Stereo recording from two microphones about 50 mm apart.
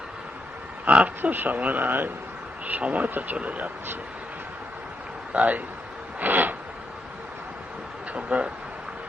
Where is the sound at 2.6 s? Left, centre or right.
Right.